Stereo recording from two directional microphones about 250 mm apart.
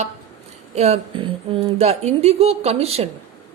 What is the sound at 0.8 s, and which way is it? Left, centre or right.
A woman's voice, right.